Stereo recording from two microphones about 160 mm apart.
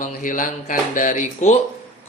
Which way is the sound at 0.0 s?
55° left (ahead or behind).